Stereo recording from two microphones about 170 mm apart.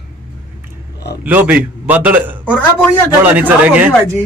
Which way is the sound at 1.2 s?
10° right (ahead or behind).